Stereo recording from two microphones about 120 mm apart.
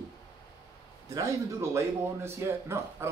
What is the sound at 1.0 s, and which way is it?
Speech, 25° right (ahead or behind).